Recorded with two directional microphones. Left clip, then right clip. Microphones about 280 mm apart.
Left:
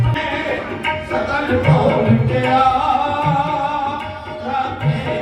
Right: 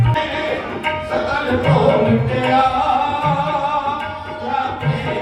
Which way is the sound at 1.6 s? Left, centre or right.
Centre.